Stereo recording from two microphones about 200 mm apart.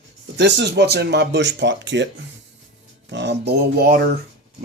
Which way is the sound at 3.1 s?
60° right (ahead or behind).